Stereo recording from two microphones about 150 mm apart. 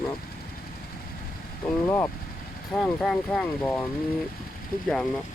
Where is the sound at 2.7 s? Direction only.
5° left (ahead or behind).